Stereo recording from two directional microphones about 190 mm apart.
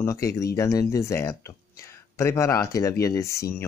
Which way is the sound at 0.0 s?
15° left (ahead or behind).